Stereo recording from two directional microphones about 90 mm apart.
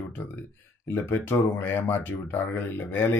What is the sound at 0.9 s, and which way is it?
Speech, 15° left (ahead or behind).